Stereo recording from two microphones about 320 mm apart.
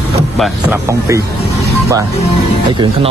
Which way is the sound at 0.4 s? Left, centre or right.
Centre.